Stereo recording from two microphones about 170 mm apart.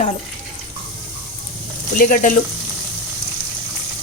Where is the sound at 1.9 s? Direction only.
55° left (ahead or behind).